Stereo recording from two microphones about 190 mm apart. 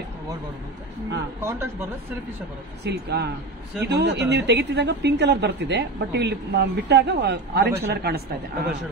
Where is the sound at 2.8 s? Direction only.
60° right (ahead or behind).